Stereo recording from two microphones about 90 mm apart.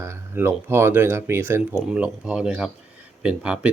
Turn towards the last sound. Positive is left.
turn(degrees=-10)  # may be behind; listen again after turning